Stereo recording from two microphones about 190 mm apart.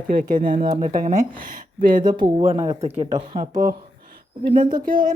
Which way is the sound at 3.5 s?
45° right (ahead or behind).